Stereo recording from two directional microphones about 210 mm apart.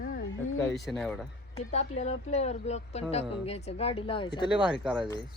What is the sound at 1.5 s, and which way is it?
Speech, 30° left (ahead or behind).